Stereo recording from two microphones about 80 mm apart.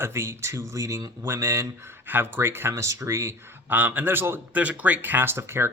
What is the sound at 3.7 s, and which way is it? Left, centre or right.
Speech, right.